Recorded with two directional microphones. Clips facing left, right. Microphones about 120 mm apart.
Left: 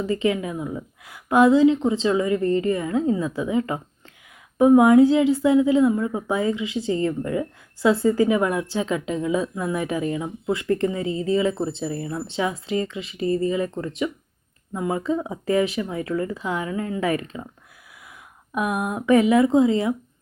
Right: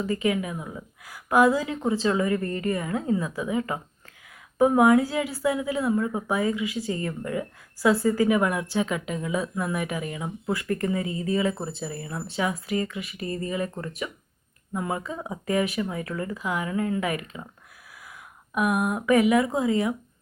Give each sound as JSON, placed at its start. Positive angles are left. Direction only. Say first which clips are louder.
{"t": 0.0, "sound": "a woman's voice", "louder": "left 3 dB", "side_deg": 30}
{"t": 18.5, "sound": "a woman's voice", "louder": "even", "side_deg": 25}